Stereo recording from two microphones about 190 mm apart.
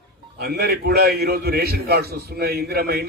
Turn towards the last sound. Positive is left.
turn(degrees=-55)  # may be behind; listen again after turning